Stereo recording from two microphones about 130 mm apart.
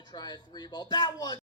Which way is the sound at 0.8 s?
30° left (ahead or behind).